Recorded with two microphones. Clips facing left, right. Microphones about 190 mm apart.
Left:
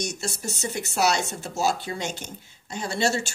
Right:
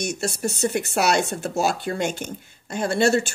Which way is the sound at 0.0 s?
60° right (ahead or behind).